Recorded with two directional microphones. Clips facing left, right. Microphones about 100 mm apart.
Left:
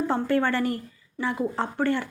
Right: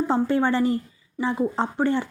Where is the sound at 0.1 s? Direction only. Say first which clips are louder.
Right 3 dB; 20° right (ahead or behind).